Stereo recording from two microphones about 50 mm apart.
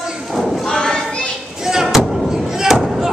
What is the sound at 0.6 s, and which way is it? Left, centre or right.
Thump, centre.